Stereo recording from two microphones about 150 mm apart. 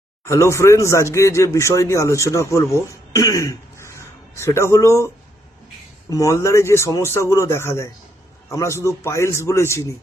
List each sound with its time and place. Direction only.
0.3 s speech: 20° left (ahead or behind)